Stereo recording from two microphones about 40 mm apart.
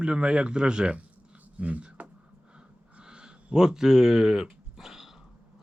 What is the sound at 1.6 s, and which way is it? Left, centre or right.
Speech, right.